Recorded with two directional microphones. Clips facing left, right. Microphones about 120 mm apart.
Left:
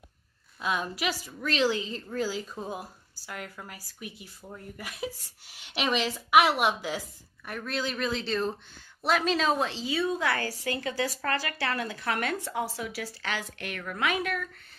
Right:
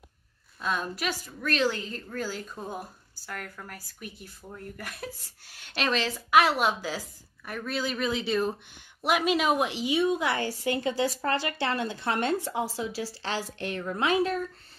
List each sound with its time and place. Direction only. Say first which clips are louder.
0.6 s a woman's voice: even; 5° left (ahead or behind); by 14.5 s 30° right (ahead or behind)